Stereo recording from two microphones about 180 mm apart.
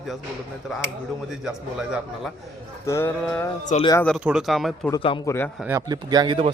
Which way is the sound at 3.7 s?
40° left (ahead or behind).